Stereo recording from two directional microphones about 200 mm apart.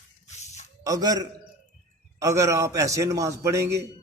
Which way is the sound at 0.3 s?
35° left (ahead or behind).